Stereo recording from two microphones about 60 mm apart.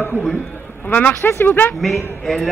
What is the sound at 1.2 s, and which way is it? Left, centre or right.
Speech, left.